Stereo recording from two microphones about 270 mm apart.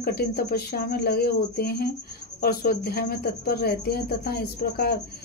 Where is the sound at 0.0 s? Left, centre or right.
Left.